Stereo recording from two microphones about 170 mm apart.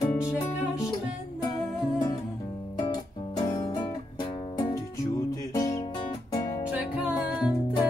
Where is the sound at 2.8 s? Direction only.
25° left (ahead or behind).